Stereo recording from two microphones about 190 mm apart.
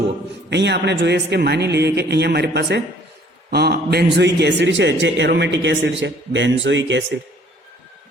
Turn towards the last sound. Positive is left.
turn(degrees=-70)  # may be behind; listen again after turning